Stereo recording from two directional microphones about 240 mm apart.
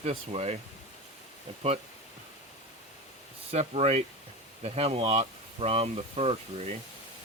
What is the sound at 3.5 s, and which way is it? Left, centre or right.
Speech, right.